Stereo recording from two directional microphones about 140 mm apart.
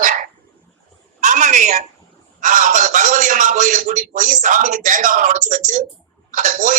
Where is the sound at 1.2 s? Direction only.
65° right (ahead or behind).